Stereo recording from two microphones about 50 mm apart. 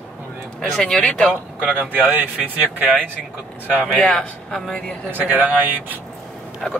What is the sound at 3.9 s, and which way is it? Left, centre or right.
A woman's voice, centre.